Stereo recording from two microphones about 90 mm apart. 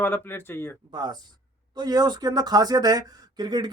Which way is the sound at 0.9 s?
50° right (ahead or behind).